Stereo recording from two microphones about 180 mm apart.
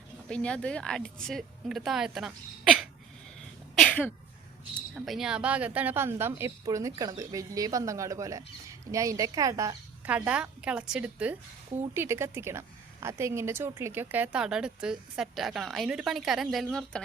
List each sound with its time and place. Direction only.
0.3 s a woman's voice: 5° left (ahead or behind)
3.8 s a sound: 5° left (ahead or behind)
4.9 s a woman's voice: centre (ahead or behind)